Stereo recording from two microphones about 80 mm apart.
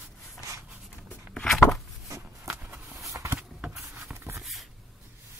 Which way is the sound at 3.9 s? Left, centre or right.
Right.